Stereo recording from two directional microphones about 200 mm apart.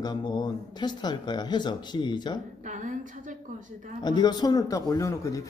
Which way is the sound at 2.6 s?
40° right (ahead or behind).